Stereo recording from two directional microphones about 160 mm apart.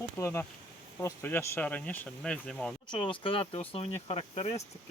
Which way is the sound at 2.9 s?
30° left (ahead or behind).